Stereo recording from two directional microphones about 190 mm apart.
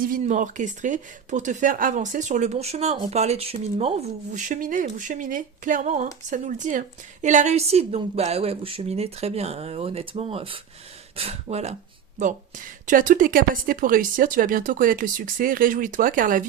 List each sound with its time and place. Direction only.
0.2 s speech: 40° right (ahead or behind)